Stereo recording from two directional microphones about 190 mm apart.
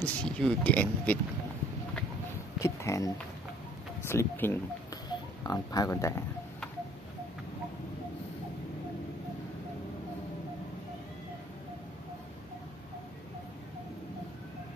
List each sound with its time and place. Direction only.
0.0 s speech: 5° left (ahead or behind)
2.6 s speech: 15° left (ahead or behind)
4.1 s speech: 15° left (ahead or behind)